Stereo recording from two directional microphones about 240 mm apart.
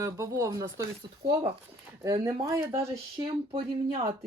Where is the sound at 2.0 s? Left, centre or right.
Centre.